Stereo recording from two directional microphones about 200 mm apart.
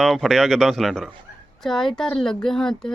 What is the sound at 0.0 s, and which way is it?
Speech, centre (ahead or behind).